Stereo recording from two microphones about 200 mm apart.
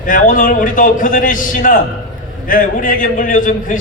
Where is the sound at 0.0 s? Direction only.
40° left (ahead or behind).